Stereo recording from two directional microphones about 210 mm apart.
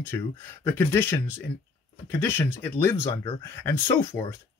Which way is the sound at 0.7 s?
10° left (ahead or behind).